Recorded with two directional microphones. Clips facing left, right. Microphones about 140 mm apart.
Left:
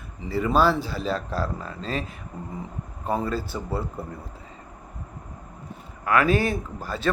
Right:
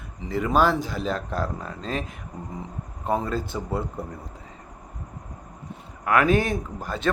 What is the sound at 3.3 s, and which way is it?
Speech, 20° right (ahead or behind).